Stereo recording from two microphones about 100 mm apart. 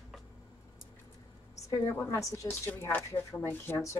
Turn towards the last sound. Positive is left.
turn(degrees=30)  # may be behind; listen again after turning